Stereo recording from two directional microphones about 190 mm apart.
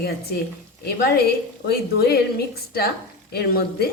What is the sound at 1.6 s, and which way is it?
A woman's voice, 55° left (ahead or behind).